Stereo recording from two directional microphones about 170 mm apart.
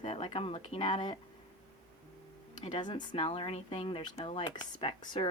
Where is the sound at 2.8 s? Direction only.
25° left (ahead or behind).